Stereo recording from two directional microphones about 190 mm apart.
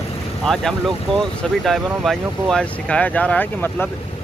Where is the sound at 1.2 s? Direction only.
Centre (ahead or behind).